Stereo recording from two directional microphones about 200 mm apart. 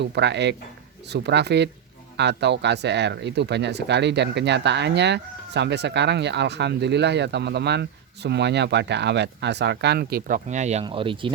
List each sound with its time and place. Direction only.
0.0 s speech: 60° right (ahead or behind); by 11.3 s 25° right (ahead or behind)